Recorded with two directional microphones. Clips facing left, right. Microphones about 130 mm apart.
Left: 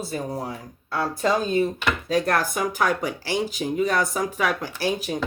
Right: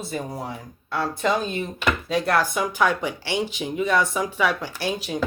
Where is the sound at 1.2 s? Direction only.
40° left (ahead or behind).